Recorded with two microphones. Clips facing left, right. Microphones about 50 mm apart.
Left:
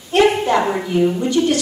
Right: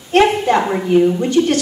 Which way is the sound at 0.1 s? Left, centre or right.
Right.